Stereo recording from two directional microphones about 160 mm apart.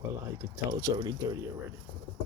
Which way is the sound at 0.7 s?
25° right (ahead or behind).